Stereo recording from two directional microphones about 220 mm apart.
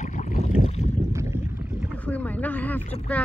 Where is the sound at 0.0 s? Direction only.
30° left (ahead or behind).